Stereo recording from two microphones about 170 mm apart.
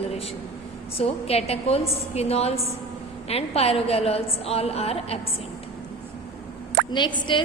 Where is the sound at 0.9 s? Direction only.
35° left (ahead or behind).